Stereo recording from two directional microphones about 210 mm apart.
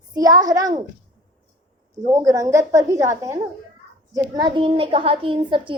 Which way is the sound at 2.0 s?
15° right (ahead or behind).